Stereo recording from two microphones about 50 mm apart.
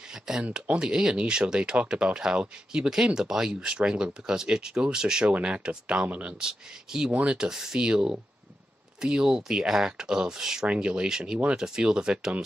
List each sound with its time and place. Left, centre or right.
0.4 s speech: right
6.4 s speech: centre
7.1 s speech: right
7.3 s speech: centre